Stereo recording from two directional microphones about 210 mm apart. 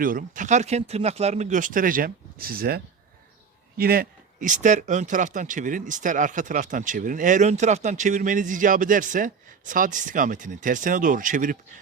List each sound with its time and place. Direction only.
0.0 s speech: 40° right (ahead or behind)